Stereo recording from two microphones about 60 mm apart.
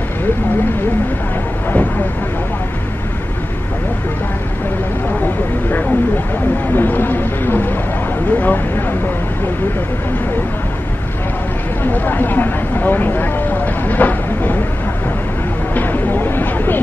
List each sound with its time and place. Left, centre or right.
6.7 s speech: left
11.8 s speech: left
15.7 s a sound: left